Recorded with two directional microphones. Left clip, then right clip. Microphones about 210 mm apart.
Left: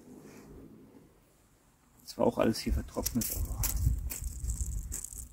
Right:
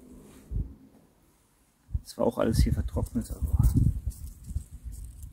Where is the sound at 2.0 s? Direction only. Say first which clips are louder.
Right 1 dB; 35° right (ahead or behind).